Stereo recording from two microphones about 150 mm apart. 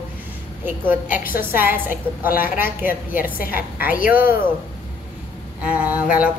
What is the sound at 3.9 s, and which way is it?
Speech, 70° left (ahead or behind).